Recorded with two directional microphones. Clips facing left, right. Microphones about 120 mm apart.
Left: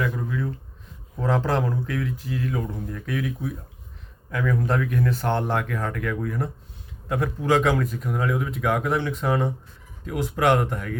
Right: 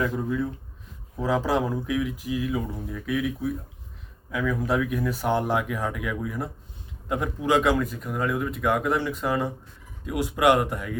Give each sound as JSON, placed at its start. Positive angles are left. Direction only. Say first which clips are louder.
{"t": 0.2, "sound": "speech", "louder": "right 2 dB", "side_deg": -15}
{"t": 1.1, "sound": "speech", "louder": "even", "side_deg": -5}